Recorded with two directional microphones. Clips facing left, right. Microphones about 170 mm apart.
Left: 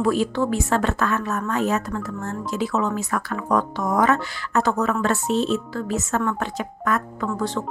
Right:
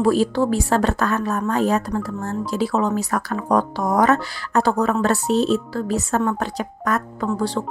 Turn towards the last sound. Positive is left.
turn(degrees=-35)  # may be behind; listen again after turning